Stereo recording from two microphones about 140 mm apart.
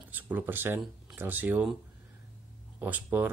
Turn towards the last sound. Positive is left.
turn(degrees=-10)  # may be behind; listen again after turning